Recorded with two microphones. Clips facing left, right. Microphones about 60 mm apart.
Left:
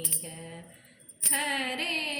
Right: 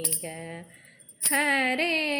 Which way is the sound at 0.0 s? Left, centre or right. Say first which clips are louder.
Right 6 dB; right.